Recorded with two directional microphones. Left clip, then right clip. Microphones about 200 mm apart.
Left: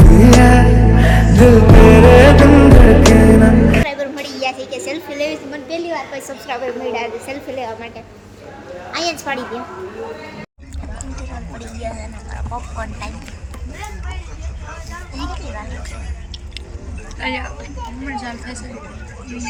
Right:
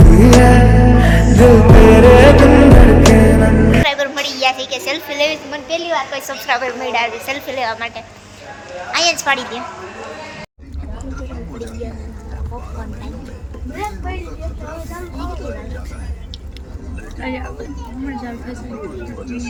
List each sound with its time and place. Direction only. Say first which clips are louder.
0.0 s music: right 1 dB; centre (ahead or behind)
8.9 s a woman's voice: right 6 dB; centre (ahead or behind)
17.2 s speech: left 3 dB; 15° right (ahead or behind)